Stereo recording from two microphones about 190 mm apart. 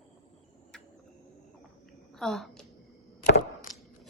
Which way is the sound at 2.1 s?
Centre (ahead or behind).